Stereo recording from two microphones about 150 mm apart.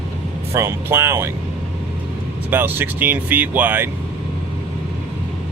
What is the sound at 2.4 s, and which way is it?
Speech, 15° right (ahead or behind).